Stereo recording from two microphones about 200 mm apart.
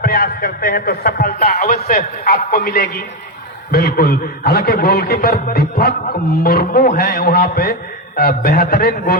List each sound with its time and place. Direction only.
0.0 s a man's voice: 50° left (ahead or behind)